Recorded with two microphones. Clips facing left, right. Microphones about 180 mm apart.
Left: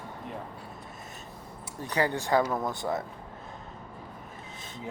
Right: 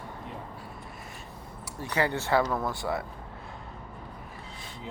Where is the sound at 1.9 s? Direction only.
15° left (ahead or behind).